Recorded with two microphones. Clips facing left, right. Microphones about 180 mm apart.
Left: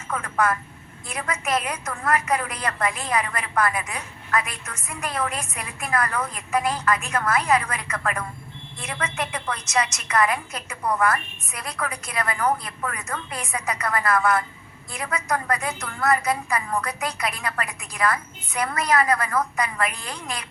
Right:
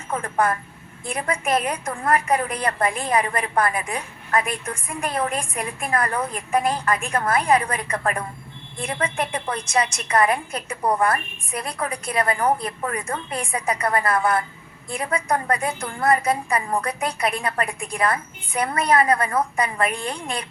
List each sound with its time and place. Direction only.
0.1 s a woman's voice: 30° right (ahead or behind)